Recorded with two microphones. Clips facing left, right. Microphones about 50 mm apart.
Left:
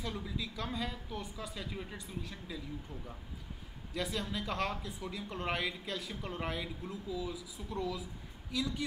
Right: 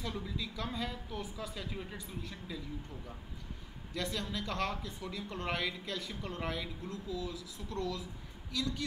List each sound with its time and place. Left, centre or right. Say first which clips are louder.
0.0 s speech: even; centre
3.9 s speech: left 1 dB; centre